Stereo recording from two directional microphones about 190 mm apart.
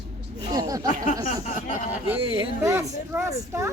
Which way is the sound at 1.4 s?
40° left (ahead or behind).